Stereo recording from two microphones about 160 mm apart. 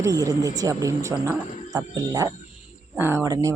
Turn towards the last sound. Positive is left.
turn(degrees=-20)  # may be behind; listen again after turning